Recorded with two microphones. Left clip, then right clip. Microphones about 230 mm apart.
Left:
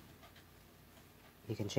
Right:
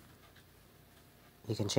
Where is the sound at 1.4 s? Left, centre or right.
Right.